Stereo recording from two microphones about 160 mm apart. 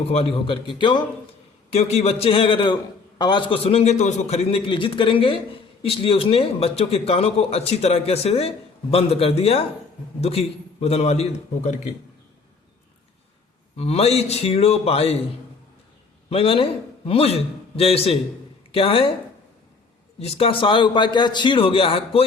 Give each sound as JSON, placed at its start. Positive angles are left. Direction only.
{"t": 0.1, "sound": "a man's voice", "side_deg": 35}
{"t": 1.7, "sound": "a man's voice", "side_deg": 40}
{"t": 13.7, "sound": "a man's voice", "side_deg": 40}
{"t": 16.3, "sound": "a man's voice", "side_deg": 35}
{"t": 20.1, "sound": "a man's voice", "side_deg": 40}